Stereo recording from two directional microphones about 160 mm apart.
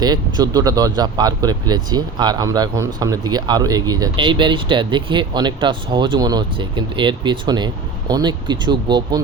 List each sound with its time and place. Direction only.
0.0 s speech: 25° right (ahead or behind)